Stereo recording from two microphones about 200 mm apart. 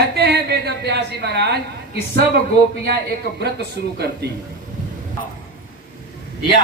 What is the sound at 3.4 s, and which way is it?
Speech, 55° right (ahead or behind).